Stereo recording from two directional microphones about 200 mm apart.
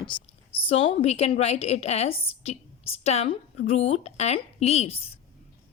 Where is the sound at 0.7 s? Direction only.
30° left (ahead or behind).